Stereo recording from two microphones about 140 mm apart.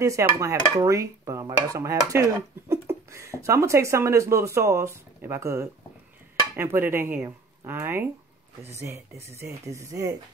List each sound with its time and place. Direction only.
0.0 s dishes: 20° right (ahead or behind)
6.5 s a sound: 15° right (ahead or behind)
7.2 s speech: 20° right (ahead or behind)
8.8 s dishes: 20° right (ahead or behind)